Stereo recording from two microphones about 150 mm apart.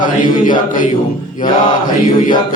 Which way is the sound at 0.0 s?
60° left (ahead or behind).